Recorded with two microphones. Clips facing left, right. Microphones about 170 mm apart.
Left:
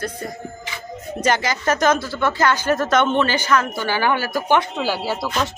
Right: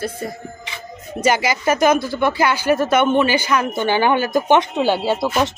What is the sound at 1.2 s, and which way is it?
Speech, 10° right (ahead or behind).